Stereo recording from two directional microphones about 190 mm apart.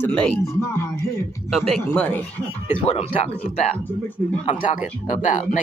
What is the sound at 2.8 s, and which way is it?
Speech, 30° left (ahead or behind).